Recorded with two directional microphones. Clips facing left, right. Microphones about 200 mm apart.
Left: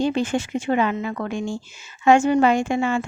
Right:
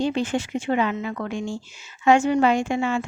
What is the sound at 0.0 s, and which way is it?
Speech, 45° left (ahead or behind).